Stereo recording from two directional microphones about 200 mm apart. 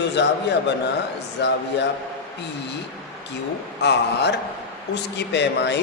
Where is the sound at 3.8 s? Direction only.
55° left (ahead or behind).